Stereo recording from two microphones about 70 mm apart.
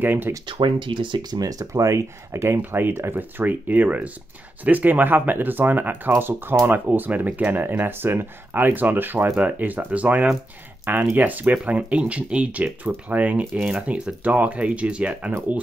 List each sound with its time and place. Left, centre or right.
0.0 s speech: right
0.6 s speech: right
1.2 s speech: right; by 15.3 s centre